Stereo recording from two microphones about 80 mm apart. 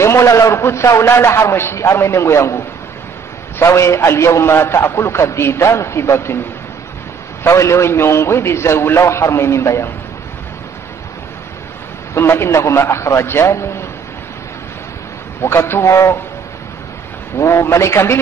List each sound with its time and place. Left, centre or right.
0.0 s a man's voice: left
7.4 s a man's voice: left
12.1 s a man's voice: left
15.4 s a man's voice: left
17.4 s a man's voice: left